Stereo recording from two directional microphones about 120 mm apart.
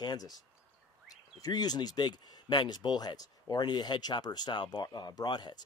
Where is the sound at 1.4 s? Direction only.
35° left (ahead or behind).